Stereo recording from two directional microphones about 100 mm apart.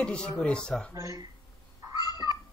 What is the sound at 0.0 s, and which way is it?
Speech, 10° left (ahead or behind).